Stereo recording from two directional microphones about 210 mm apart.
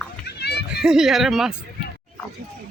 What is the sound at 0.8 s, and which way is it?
Speech, 5° right (ahead or behind).